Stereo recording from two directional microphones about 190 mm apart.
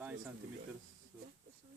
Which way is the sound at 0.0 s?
10° right (ahead or behind).